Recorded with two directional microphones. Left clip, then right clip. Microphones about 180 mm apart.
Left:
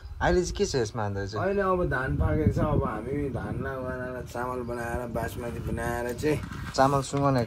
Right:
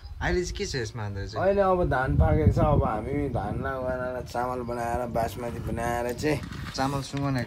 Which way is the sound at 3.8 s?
15° right (ahead or behind).